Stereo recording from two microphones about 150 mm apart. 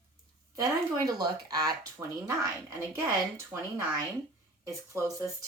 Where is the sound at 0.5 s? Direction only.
25° right (ahead or behind).